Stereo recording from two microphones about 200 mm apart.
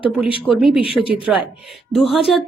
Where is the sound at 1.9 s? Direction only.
Centre (ahead or behind).